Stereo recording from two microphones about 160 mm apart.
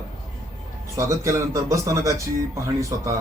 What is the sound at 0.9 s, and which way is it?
Speech, 20° right (ahead or behind).